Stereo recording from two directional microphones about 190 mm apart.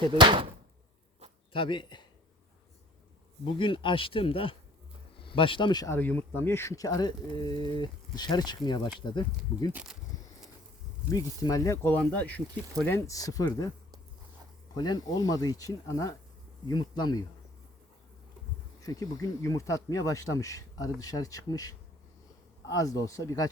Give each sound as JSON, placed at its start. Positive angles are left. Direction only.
{"t": 0.1, "sound": "speech", "side_deg": -25}
{"t": 1.5, "sound": "speech", "side_deg": 25}
{"t": 3.4, "sound": "speech", "side_deg": 25}
{"t": 9.7, "sound": "speech", "side_deg": -5}
{"t": 11.1, "sound": "speech", "side_deg": 15}
{"t": 14.8, "sound": "speech", "side_deg": 20}
{"t": 18.8, "sound": "speech", "side_deg": 20}